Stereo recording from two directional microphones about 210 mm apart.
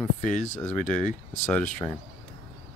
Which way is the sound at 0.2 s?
35° left (ahead or behind).